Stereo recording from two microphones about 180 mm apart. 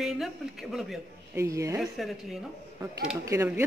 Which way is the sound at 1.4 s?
15° right (ahead or behind).